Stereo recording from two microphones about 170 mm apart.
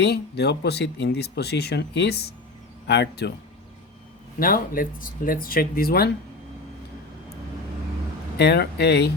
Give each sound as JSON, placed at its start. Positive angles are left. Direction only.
{"t": 0.0, "sound": "speech", "side_deg": 75}
{"t": 4.4, "sound": "speech", "side_deg": 60}
{"t": 8.4, "sound": "speech", "side_deg": 70}